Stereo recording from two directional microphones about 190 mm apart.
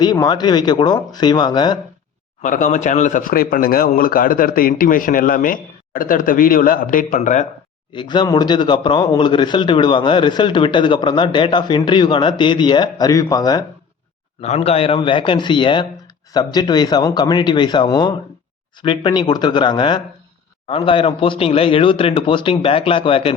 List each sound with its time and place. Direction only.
0.0 s speech: 20° left (ahead or behind)
2.4 s speech: 40° left (ahead or behind)
7.9 s speech: 25° left (ahead or behind)
14.4 s speech: 35° left (ahead or behind)